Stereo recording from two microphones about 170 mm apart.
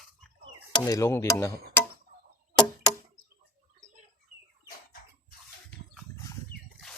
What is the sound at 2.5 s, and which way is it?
Chop, 25° left (ahead or behind).